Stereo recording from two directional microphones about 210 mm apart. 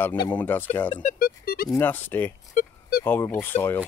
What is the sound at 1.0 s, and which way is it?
Music, 45° left (ahead or behind).